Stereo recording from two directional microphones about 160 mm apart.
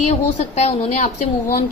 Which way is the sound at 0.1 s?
45° left (ahead or behind).